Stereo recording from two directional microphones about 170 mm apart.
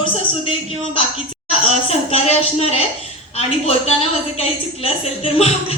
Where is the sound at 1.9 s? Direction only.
35° left (ahead or behind).